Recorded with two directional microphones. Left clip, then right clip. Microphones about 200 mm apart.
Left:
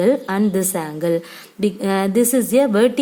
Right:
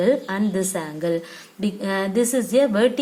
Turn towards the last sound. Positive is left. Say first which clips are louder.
# left 3 dB
turn(degrees=45)  # may be behind; listen again after turning